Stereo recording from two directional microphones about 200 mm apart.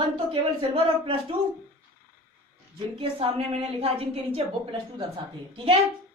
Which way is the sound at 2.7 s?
25° right (ahead or behind).